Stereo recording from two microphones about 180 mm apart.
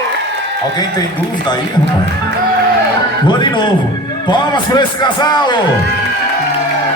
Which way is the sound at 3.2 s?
25° left (ahead or behind).